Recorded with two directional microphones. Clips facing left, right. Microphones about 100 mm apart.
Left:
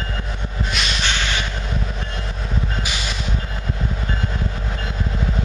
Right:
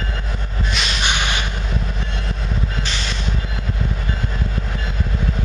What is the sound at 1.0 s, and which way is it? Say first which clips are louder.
Vehicle: right 3 dB; 15° right (ahead or behind).